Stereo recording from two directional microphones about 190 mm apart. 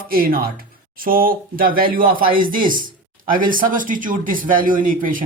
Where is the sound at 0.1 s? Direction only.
50° right (ahead or behind).